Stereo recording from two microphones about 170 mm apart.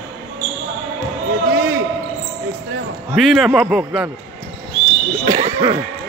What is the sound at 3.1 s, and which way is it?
Speech, centre (ahead or behind).